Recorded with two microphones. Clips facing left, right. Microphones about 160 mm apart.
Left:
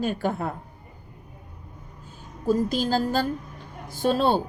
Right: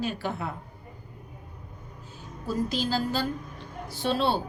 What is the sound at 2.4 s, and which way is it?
A woman's voice, 45° left (ahead or behind).